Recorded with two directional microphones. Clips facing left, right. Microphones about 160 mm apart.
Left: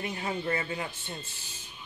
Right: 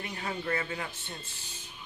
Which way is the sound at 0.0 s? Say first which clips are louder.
Left 3 dB; 20° left (ahead or behind).